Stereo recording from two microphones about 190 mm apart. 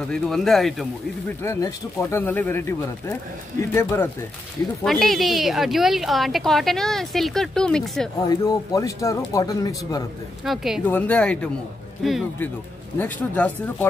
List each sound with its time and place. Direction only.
0.1 s a woman's voice: centre (ahead or behind)
1.4 s speech: 15° left (ahead or behind)
4.8 s a woman's voice: centre (ahead or behind)
8.2 s speech: 20° left (ahead or behind)
10.4 s a woman's voice: centre (ahead or behind)